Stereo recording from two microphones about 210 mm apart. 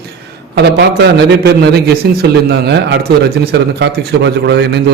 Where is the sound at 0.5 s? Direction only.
55° right (ahead or behind).